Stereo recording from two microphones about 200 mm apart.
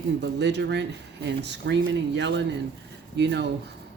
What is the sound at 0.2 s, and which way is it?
Speech, 60° right (ahead or behind).